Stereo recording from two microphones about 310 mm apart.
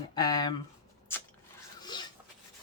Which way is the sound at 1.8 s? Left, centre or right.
Centre.